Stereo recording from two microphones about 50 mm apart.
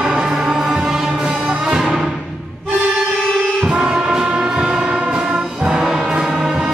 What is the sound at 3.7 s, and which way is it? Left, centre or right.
Brass instrument, centre.